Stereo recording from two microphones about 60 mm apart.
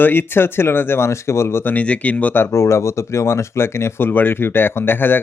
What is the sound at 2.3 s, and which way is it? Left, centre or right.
Speech, left.